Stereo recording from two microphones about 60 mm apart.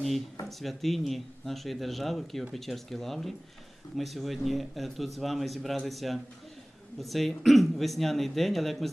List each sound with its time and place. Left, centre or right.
0.4 s a man's voice: centre